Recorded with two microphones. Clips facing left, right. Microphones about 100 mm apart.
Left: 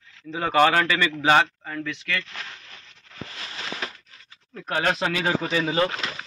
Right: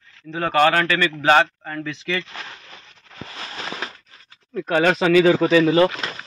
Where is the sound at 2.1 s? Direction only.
15° right (ahead or behind).